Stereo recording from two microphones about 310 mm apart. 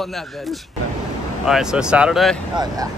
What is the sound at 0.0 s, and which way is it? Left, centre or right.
Speech, centre.